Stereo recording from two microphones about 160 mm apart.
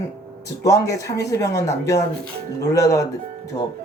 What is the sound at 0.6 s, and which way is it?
Speech, 20° left (ahead or behind).